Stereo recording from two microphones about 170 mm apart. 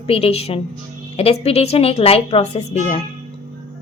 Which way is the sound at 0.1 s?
35° left (ahead or behind).